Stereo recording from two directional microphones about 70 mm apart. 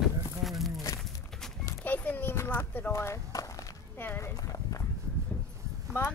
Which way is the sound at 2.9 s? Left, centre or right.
Left.